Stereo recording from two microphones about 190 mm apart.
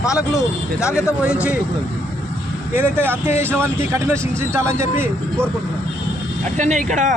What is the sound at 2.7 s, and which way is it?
Speech, 10° right (ahead or behind).